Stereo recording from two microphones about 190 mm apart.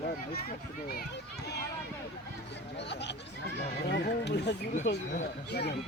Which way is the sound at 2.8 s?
65° left (ahead or behind).